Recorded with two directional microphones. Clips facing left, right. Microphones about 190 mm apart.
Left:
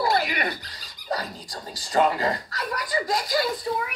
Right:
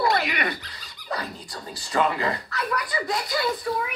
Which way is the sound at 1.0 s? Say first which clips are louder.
Left 2 dB; 35° left (ahead or behind).